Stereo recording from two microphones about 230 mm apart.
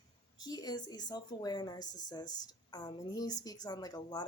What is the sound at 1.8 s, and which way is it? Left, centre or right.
Speech, left.